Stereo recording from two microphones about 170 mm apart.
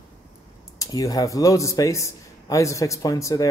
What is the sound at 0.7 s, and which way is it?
Speech, 20° left (ahead or behind).